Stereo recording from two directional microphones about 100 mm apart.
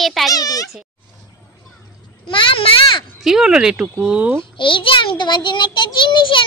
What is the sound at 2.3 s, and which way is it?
Speech, 60° left (ahead or behind).